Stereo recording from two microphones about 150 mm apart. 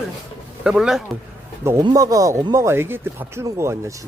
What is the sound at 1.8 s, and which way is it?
Speech, 25° right (ahead or behind).